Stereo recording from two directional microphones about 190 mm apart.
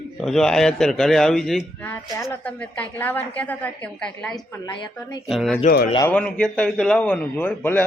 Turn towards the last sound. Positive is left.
turn(degrees=10)  # may be behind; listen again after turning